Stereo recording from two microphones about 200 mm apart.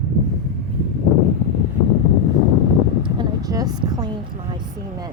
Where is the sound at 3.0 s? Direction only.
20° right (ahead or behind).